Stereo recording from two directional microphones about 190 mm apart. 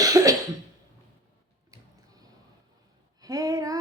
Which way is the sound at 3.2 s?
20° right (ahead or behind).